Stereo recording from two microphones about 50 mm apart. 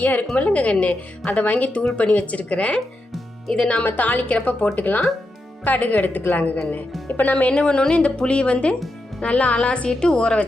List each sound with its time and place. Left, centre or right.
0.0 s speech: left; by 3.8 s centre
3.8 s speech: left
7.5 s speech: centre